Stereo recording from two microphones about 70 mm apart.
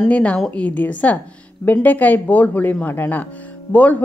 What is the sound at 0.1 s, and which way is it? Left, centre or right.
A woman's voice, centre.